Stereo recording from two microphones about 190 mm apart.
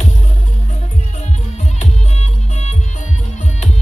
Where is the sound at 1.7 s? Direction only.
35° left (ahead or behind).